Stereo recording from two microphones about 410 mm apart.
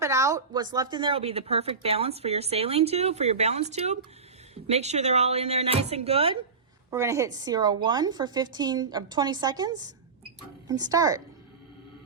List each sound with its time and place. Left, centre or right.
0.0 s a woman's voice: centre